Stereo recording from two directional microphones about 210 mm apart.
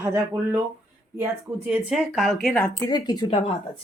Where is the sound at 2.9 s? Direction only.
20° left (ahead or behind).